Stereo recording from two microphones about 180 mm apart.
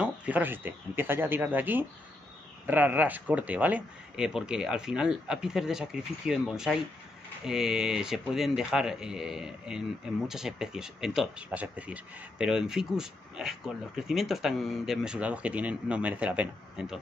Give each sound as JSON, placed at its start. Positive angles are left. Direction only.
{"t": 0.0, "sound": "speech", "side_deg": -10}